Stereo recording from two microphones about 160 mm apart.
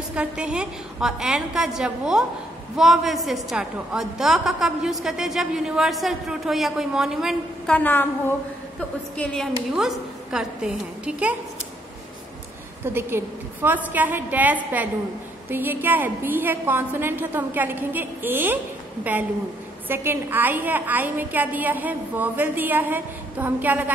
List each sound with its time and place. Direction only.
0.1 s a woman's voice: 5° right (ahead or behind)
7.7 s a woman's voice: 10° left (ahead or behind); by 11.3 s 5° right (ahead or behind)
12.8 s a woman's voice: 15° right (ahead or behind)
19.9 s a woman's voice: 15° right (ahead or behind)